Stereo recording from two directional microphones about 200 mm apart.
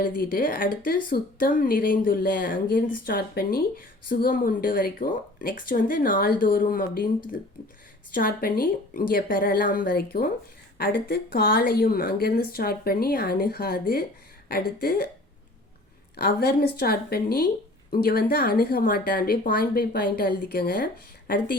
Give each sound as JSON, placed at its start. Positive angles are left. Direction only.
{"t": 0.0, "sound": "a woman's voice", "side_deg": 45}
{"t": 8.1, "sound": "a woman's voice", "side_deg": 45}
{"t": 16.1, "sound": "a woman's voice", "side_deg": 50}